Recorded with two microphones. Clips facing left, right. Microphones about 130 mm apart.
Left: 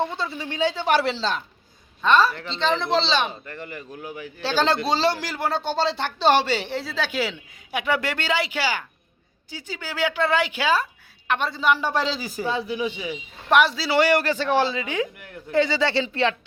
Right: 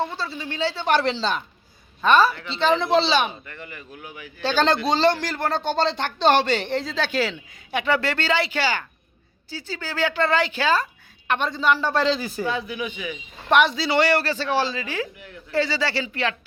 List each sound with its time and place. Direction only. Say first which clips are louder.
0.0 s speech: left 1 dB; 20° left (ahead or behind); by 3.3 s 5° right (ahead or behind)
3.4 s a man's voice: left 4 dB; 40° left (ahead or behind)
4.4 s speech: right 1 dB; 5° left (ahead or behind)
12.5 s speech: left 5 dB; 30° left (ahead or behind)
13.5 s speech: even; 5° left (ahead or behind); by 16.3 s 25° left (ahead or behind)